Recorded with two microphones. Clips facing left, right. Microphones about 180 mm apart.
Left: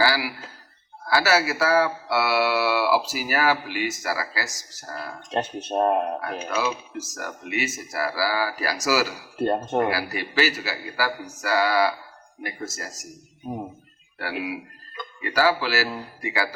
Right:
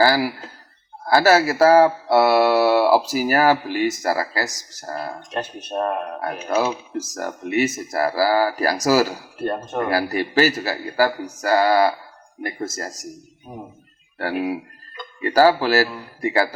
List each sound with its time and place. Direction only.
0.0 s a sound: 45° right (ahead or behind)
1.0 s speech: 45° right (ahead or behind)
5.3 s speech: 25° left (ahead or behind)
6.5 s speech: 45° right (ahead or behind)
9.4 s speech: 20° left (ahead or behind)
9.9 s speech: 45° right (ahead or behind)
14.2 s speech: 45° right (ahead or behind)